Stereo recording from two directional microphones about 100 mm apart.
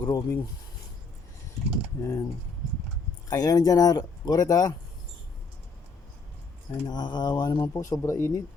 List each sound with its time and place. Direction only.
0.0 s speech: 35° left (ahead or behind)
2.0 s speech: 25° left (ahead or behind)
3.2 s speech: 40° left (ahead or behind)
6.8 s speech: 45° left (ahead or behind)
7.7 s speech: 30° left (ahead or behind)